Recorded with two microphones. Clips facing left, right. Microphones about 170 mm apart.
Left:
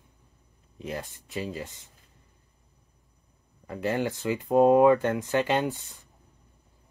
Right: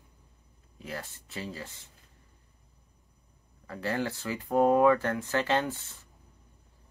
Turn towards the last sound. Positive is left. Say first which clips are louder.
# left 2 dB
turn(degrees=15)  # may be behind; listen again after turning